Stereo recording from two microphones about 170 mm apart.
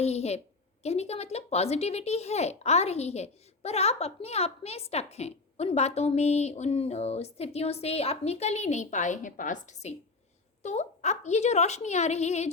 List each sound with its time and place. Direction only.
0.0 s a woman's voice: 40° left (ahead or behind)